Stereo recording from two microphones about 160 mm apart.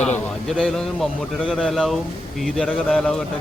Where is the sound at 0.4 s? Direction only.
Centre (ahead or behind).